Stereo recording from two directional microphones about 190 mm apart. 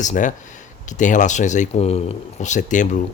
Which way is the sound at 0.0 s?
40° left (ahead or behind).